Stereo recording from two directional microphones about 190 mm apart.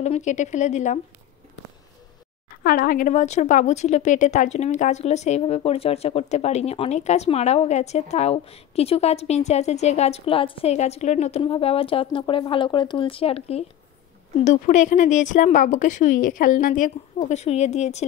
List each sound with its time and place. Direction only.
0.0 s a woman's voice: 40° left (ahead or behind)
2.6 s a woman's voice: 45° left (ahead or behind)